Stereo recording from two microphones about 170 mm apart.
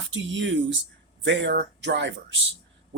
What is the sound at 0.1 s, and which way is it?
Speech, 90° right.